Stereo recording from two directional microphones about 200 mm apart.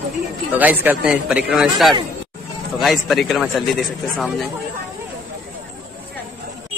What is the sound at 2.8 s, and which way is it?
Speech, centre (ahead or behind).